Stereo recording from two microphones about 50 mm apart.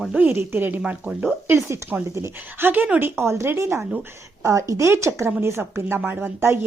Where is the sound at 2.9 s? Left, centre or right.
Right.